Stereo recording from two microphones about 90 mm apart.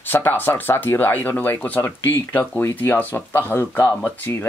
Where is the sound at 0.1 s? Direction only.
20° left (ahead or behind).